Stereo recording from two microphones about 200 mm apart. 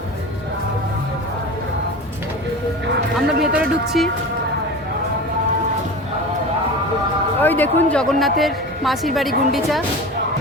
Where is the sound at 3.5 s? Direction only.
Centre (ahead or behind).